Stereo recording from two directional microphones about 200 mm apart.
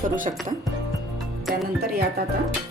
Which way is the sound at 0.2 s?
40° right (ahead or behind).